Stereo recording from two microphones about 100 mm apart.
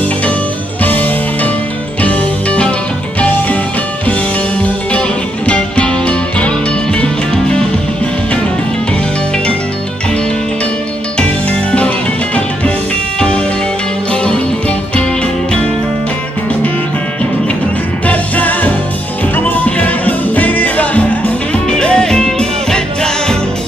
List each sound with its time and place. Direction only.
0.8 s music: 15° left (ahead or behind)
5.5 s music: 10° left (ahead or behind)
11.1 s music: 10° left (ahead or behind)
18.0 s music: 15° left (ahead or behind)